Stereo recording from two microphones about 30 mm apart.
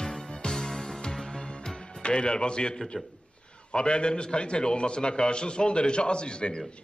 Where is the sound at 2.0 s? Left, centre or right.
Left.